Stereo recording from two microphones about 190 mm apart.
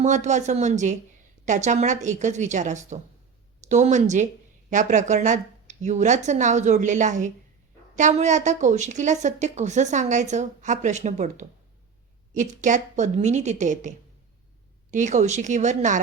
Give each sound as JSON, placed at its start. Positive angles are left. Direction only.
{"t": 0.0, "sound": "a woman's voice", "side_deg": -40}